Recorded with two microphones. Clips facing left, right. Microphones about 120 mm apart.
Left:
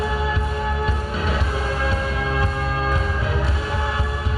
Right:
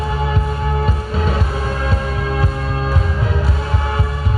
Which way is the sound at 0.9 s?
40° right (ahead or behind).